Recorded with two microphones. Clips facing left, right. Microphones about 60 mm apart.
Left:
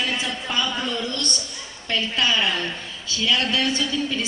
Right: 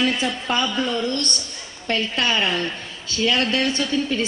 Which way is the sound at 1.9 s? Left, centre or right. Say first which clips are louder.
Right 1 dB; right.